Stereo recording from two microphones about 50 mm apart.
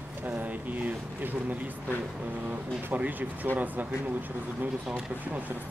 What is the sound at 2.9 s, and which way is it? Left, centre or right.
Speech, right.